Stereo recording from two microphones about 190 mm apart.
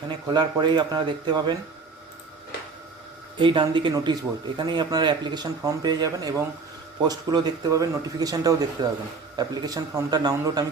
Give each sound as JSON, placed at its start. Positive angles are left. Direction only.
{"t": 0.1, "sound": "speech", "side_deg": -25}
{"t": 3.3, "sound": "speech", "side_deg": -25}